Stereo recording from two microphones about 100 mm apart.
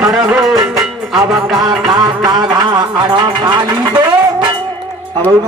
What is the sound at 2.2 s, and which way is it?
Music, 40° right (ahead or behind).